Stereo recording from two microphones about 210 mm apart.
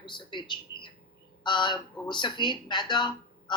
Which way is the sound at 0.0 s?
20° left (ahead or behind).